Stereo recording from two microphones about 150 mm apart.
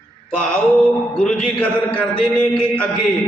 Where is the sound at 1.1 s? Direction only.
5° left (ahead or behind).